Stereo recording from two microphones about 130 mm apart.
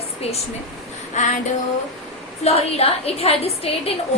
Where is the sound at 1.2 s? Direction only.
70° left (ahead or behind).